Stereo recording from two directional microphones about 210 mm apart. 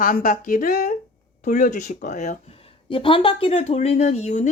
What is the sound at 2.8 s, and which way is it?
Speech, 25° left (ahead or behind).